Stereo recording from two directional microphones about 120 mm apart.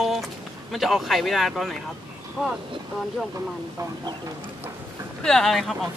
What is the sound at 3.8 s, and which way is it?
Speech, 30° right (ahead or behind).